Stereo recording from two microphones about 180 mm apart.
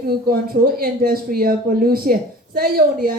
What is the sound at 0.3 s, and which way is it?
Speech, 55° right (ahead or behind).